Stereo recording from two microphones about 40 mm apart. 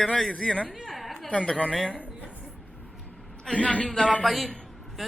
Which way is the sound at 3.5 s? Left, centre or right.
Left.